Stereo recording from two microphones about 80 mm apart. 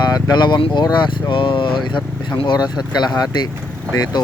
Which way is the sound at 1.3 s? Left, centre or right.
Left.